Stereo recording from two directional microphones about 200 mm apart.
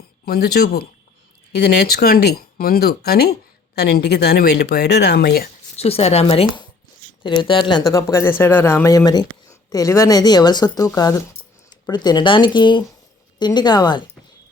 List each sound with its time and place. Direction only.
0.3 s speech: 55° left (ahead or behind)
5.7 s speech: 30° left (ahead or behind)